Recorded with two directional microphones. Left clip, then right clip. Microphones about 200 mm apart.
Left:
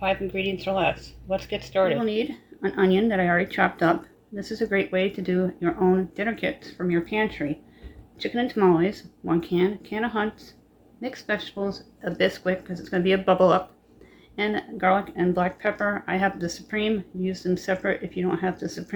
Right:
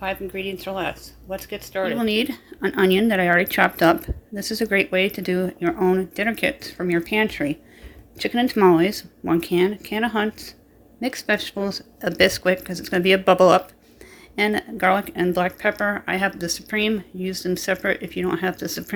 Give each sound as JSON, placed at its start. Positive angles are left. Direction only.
{"t": 0.0, "sound": "speech", "side_deg": -5}
{"t": 2.0, "sound": "speech", "side_deg": -45}